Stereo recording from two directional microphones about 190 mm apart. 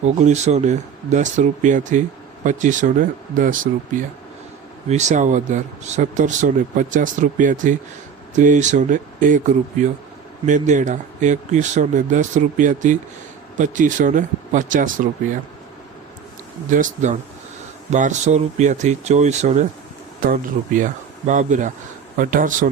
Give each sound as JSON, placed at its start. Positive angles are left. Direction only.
{"t": 0.0, "sound": "speech", "side_deg": -35}
{"t": 16.6, "sound": "speech", "side_deg": -40}